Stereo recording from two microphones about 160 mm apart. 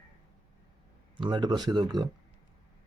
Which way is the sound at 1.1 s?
30° right (ahead or behind).